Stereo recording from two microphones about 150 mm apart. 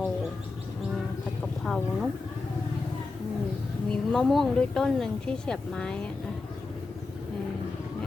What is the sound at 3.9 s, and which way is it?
Speech, 5° left (ahead or behind).